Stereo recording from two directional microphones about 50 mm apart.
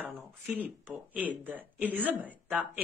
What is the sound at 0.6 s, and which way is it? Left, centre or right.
A woman's voice, right.